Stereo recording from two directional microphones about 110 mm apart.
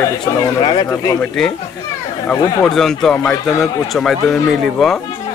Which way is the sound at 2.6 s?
5° left (ahead or behind).